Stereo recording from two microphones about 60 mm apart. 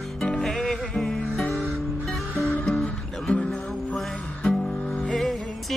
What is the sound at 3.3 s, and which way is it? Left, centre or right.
Music, centre.